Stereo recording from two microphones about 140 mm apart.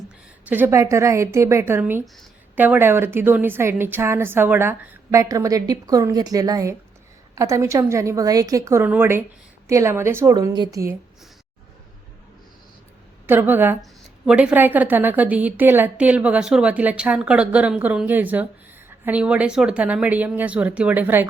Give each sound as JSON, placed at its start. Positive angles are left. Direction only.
{"t": 0.4, "sound": "a woman's voice", "side_deg": -15}
{"t": 10.3, "sound": "a woman's voice", "side_deg": -30}
{"t": 13.2, "sound": "a woman's voice", "side_deg": -15}